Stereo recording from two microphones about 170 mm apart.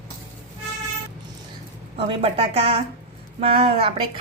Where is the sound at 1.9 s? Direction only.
35° right (ahead or behind).